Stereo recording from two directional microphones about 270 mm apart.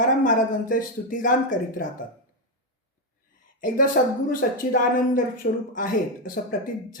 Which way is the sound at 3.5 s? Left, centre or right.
Left.